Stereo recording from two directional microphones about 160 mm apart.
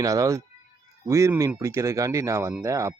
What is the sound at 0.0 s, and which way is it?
Speech, 20° right (ahead or behind).